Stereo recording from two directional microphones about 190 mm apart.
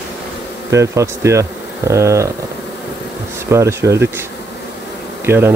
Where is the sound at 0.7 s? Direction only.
15° right (ahead or behind).